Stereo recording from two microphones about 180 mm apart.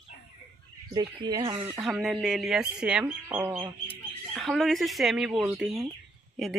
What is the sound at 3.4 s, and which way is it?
Speech, 20° right (ahead or behind).